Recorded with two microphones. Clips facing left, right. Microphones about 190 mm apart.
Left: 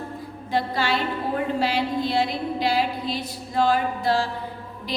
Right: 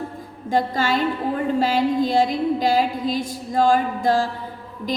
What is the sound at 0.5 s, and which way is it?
A woman's voice, 45° right (ahead or behind).